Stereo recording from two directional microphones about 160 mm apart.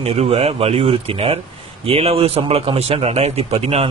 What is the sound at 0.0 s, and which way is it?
A man's voice, 40° right (ahead or behind).